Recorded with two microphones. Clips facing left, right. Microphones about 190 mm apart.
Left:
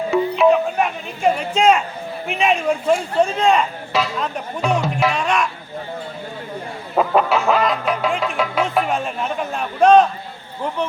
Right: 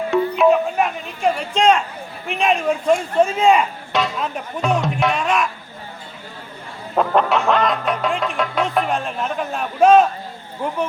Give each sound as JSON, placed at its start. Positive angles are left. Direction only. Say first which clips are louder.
{"t": 0.1, "sound": "music", "louder": "even", "side_deg": 0}
{"t": 2.2, "sound": "speech", "louder": "even", "side_deg": 0}
{"t": 6.9, "sound": "music", "louder": "even", "side_deg": 5}